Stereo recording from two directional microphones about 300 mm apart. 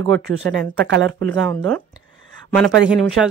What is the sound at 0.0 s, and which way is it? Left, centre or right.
Speech, right.